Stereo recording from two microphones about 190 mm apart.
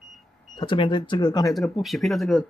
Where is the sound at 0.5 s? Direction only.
25° left (ahead or behind).